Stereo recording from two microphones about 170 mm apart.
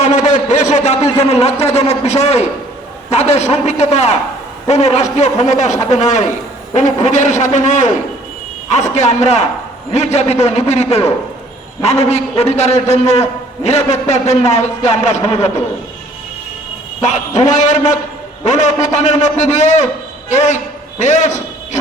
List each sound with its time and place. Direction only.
0.0 s a sound: 45° left (ahead or behind)
1.2 s a man's voice: 40° left (ahead or behind)
17.0 s a man's voice: 45° left (ahead or behind)